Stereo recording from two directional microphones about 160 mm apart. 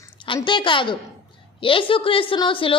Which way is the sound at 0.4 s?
30° left (ahead or behind).